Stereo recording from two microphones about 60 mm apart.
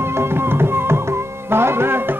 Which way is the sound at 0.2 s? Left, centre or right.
Right.